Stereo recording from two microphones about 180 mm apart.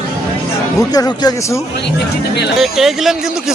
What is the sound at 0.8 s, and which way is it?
Speech, 20° left (ahead or behind).